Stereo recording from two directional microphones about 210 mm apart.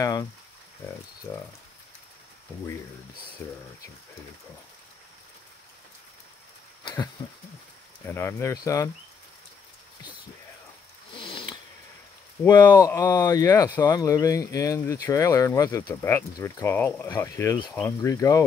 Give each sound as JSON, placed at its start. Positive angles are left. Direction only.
{"t": 0.0, "sound": "speech", "side_deg": 15}
{"t": 3.4, "sound": "speech", "side_deg": 10}
{"t": 6.8, "sound": "a sound", "side_deg": 20}
{"t": 8.1, "sound": "speech", "side_deg": 10}
{"t": 11.1, "sound": "cat", "side_deg": 25}
{"t": 12.4, "sound": "speech", "side_deg": 20}